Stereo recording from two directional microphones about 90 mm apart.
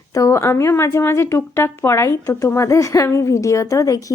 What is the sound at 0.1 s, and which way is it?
Speech, 35° left (ahead or behind).